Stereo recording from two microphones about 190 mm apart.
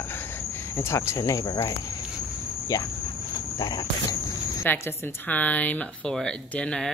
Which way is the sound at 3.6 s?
20° left (ahead or behind).